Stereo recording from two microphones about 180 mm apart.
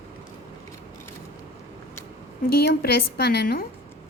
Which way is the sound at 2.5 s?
60° left (ahead or behind).